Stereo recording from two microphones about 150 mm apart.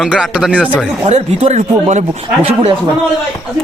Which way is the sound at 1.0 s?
45° right (ahead or behind).